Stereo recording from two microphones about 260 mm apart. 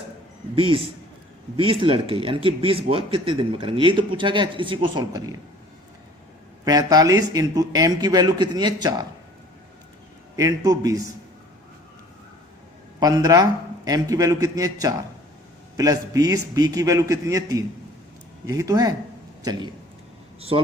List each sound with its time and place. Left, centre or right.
0.5 s speech: right
6.7 s a man's voice: centre
10.3 s a man's voice: centre
13.0 s a man's voice: centre